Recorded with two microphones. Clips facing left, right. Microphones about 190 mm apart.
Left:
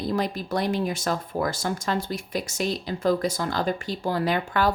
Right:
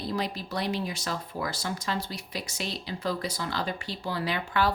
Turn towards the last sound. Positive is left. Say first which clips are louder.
# left 4 dB
turn(degrees=45)  # may be behind; listen again after turning